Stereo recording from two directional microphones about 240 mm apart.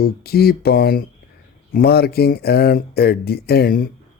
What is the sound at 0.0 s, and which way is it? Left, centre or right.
Speech, left.